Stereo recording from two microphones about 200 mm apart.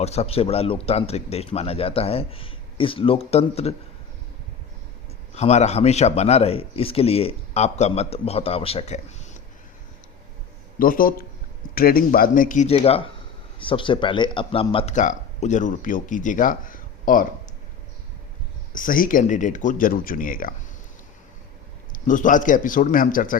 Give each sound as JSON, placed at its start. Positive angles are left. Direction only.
{"t": 0.0, "sound": "speech", "side_deg": 30}
{"t": 5.3, "sound": "speech", "side_deg": 35}
{"t": 10.8, "sound": "speech", "side_deg": 45}
{"t": 18.7, "sound": "speech", "side_deg": 45}
{"t": 21.9, "sound": "speech", "side_deg": 40}